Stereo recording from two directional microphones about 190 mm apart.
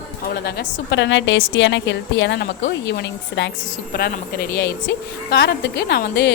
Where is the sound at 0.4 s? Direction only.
65° left (ahead or behind).